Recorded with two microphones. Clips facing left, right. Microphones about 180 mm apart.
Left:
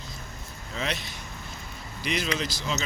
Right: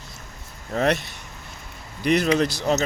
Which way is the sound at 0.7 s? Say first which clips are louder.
Right 11 dB; 55° right (ahead or behind).